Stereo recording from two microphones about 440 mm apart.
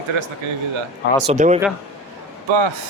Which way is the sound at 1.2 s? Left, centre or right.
Centre.